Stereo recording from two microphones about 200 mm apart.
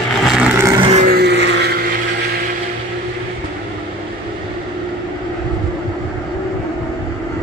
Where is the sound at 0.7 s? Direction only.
30° right (ahead or behind).